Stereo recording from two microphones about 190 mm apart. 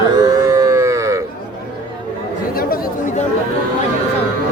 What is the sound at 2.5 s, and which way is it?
Chatter, 50° left (ahead or behind).